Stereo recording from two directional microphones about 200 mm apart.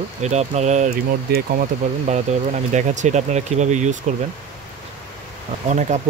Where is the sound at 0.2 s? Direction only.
35° right (ahead or behind).